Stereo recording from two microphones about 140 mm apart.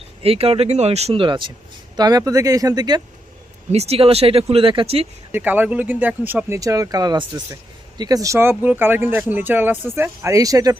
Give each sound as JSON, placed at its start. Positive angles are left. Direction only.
{"t": 0.2, "sound": "speech", "side_deg": -45}
{"t": 3.7, "sound": "speech", "side_deg": -45}
{"t": 5.3, "sound": "speech", "side_deg": -10}